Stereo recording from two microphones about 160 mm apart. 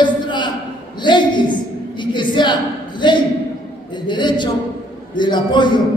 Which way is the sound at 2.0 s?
30° left (ahead or behind).